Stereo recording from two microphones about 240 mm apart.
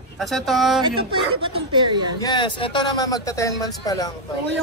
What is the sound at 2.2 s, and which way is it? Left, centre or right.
Speech, centre.